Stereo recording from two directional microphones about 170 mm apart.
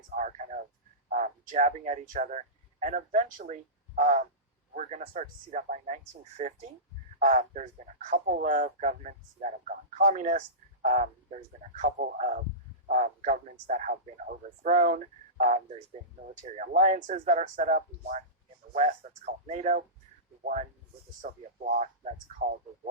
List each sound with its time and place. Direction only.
0.2 s speech: 45° right (ahead or behind)